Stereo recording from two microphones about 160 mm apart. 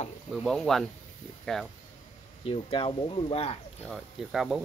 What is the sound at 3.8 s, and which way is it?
Speech, centre (ahead or behind).